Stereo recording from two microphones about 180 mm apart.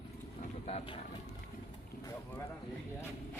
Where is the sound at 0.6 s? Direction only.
30° left (ahead or behind).